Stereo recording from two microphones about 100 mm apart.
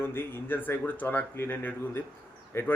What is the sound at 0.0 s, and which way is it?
Speech, 25° left (ahead or behind).